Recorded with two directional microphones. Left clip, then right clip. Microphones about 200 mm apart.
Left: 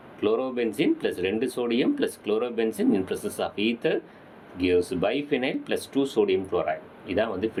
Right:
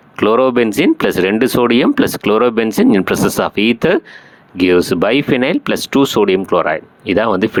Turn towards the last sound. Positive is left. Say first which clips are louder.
# right 13 dB
turn(degrees=-40)  # may be behind; listen again after turning